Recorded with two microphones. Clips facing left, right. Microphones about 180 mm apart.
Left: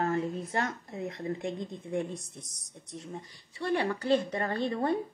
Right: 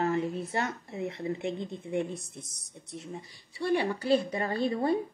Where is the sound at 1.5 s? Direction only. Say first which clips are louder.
Right 2 dB; 30° right (ahead or behind).